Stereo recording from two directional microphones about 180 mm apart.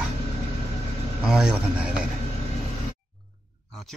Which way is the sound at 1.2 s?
5° right (ahead or behind).